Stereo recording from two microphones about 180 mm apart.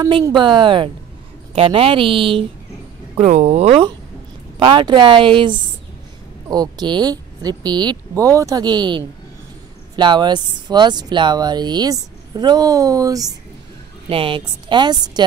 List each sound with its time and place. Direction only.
0.0 s a woman's voice: 20° right (ahead or behind); by 3.8 s 35° right (ahead or behind)
4.6 s speech: 25° right (ahead or behind)
14.0 s speech: 30° right (ahead or behind)